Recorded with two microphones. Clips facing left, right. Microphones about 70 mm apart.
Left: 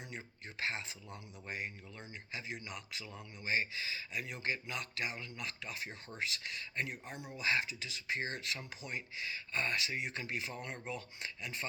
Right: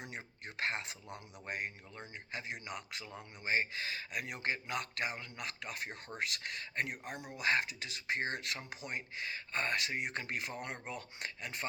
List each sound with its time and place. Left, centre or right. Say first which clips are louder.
0.6 s speech: right 2 dB; right